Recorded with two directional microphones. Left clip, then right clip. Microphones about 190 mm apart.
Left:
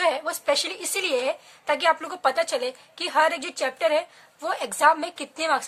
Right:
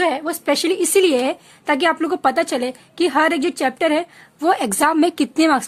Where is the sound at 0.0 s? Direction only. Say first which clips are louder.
Right 4 dB; 30° right (ahead or behind).